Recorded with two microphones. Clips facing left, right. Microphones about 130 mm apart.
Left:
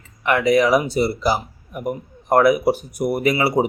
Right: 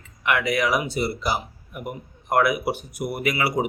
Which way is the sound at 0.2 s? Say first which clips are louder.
Left 6 dB; 35° left (ahead or behind).